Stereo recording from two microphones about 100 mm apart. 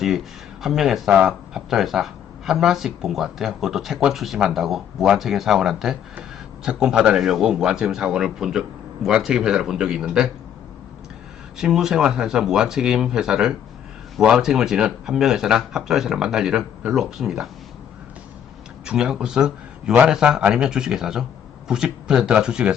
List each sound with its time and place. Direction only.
0.6 s speech: 5° right (ahead or behind)
11.5 s speech: 5° right (ahead or behind)
18.9 s speech: 10° right (ahead or behind)